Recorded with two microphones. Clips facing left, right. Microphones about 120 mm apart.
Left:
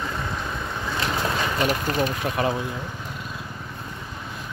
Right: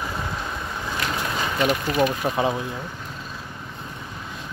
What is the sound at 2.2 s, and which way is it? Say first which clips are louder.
Speech: right 2 dB; 25° right (ahead or behind).